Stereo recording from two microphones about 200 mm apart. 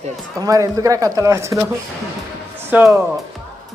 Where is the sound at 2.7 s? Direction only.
10° right (ahead or behind).